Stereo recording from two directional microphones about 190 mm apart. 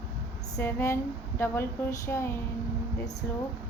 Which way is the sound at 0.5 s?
15° left (ahead or behind).